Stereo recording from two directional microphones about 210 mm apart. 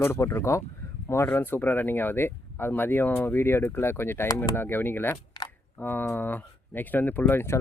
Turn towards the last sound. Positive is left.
turn(degrees=10)  # may be behind; listen again after turning